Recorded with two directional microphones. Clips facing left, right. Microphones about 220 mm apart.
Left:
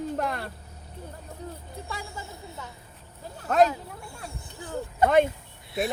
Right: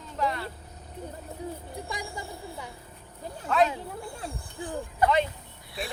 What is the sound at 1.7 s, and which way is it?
Speech, 15° right (ahead or behind).